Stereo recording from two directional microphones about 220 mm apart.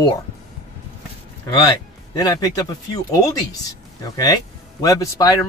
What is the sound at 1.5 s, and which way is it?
Speech, 20° left (ahead or behind).